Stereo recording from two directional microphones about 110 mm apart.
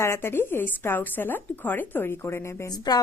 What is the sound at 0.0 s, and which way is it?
A woman's voice, 25° left (ahead or behind).